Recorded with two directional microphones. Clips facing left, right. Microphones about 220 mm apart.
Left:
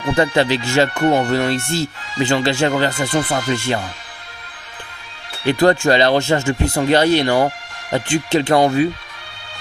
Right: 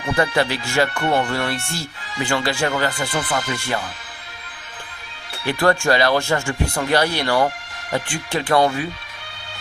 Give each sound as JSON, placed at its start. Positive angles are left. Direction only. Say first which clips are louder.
{"t": 0.2, "sound": "speech", "louder": "left 4 dB", "side_deg": 25}
{"t": 5.5, "sound": "speech", "louder": "left 4 dB", "side_deg": 20}